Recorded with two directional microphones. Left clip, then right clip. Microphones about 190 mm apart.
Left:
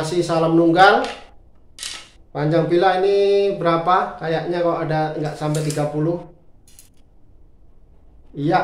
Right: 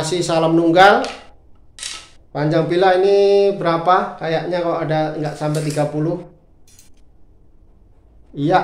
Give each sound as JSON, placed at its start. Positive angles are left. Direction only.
{"t": 0.0, "sound": "speech", "side_deg": -35}
{"t": 2.3, "sound": "speech", "side_deg": -35}
{"t": 8.4, "sound": "speech", "side_deg": -35}